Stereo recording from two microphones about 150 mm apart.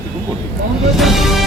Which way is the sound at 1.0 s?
Centre (ahead or behind).